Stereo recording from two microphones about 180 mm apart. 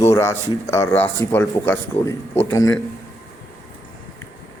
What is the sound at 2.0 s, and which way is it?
Speech, 35° left (ahead or behind).